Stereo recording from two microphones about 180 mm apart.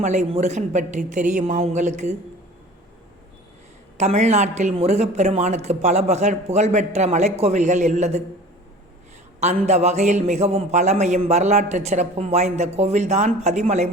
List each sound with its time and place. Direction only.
0.0 s a man's voice: 40° right (ahead or behind)
3.9 s a man's voice: 40° right (ahead or behind)
9.4 s a man's voice: 40° right (ahead or behind)